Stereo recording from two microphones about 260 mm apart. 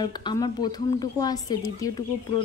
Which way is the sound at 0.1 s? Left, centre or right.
Centre.